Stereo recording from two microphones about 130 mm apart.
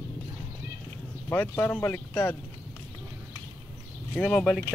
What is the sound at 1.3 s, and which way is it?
Speech, 15° left (ahead or behind).